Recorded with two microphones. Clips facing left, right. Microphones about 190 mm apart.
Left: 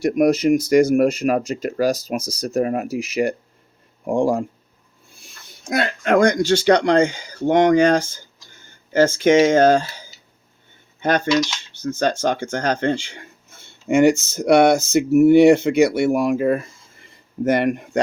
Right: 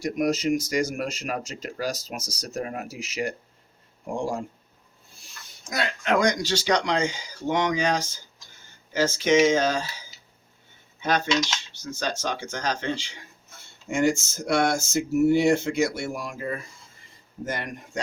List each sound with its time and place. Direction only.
0.0 s speech: 60° left (ahead or behind)
5.6 s speech: 55° left (ahead or behind)
11.8 s speech: 55° left (ahead or behind)
13.8 s speech: 65° left (ahead or behind)